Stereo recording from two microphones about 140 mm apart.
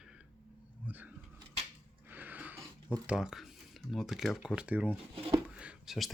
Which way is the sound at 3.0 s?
5° right (ahead or behind).